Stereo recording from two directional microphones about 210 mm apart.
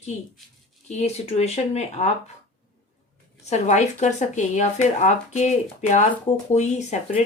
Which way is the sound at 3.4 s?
30° left (ahead or behind).